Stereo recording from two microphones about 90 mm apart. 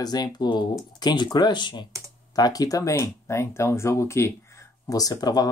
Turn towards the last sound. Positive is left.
turn(degrees=45)  # may be behind; listen again after turning